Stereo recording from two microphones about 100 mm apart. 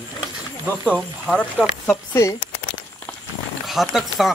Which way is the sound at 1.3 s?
10° right (ahead or behind).